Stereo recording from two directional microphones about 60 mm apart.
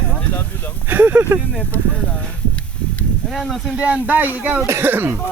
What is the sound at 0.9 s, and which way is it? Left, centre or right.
Speech, right.